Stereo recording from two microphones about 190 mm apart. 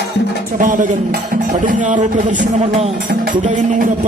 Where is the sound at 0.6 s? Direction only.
45° right (ahead or behind).